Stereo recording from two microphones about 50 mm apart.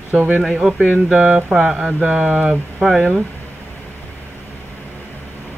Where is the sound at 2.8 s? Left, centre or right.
Centre.